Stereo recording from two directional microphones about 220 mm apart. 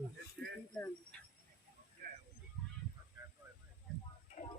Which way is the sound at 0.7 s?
5° left (ahead or behind).